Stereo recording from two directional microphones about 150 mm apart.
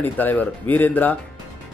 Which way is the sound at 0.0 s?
10° left (ahead or behind).